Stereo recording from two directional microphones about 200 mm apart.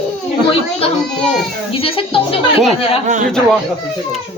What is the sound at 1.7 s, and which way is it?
Speech, 30° left (ahead or behind).